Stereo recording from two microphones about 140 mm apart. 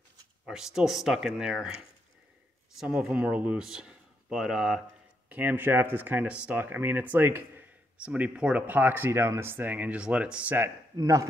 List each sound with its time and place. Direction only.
0.5 s speech: 5° right (ahead or behind)
11.0 s speech: 25° right (ahead or behind)